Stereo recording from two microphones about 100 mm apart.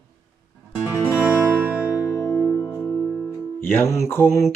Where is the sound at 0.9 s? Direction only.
25° left (ahead or behind).